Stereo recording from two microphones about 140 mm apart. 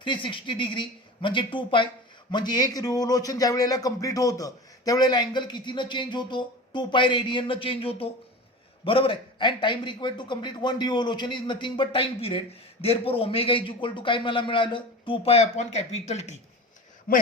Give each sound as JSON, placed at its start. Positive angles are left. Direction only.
{"t": 0.0, "sound": "a man's voice", "side_deg": 35}
{"t": 17.1, "sound": "a man's voice", "side_deg": 90}